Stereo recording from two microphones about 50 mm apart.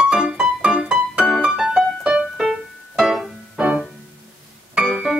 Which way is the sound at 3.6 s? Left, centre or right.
Centre.